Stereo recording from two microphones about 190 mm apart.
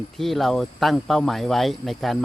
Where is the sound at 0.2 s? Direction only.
Centre (ahead or behind).